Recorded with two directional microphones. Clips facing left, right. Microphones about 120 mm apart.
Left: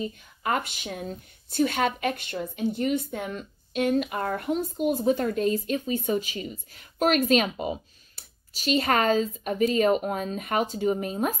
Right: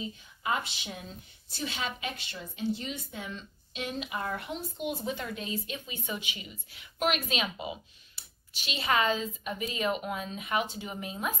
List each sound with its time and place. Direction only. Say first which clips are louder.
0.0 s speech: left 5 dB; 55° left (ahead or behind)